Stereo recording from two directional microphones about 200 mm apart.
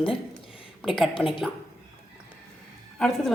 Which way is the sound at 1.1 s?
25° left (ahead or behind).